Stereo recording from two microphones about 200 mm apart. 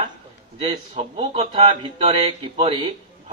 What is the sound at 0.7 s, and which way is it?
A man's voice, 30° right (ahead or behind).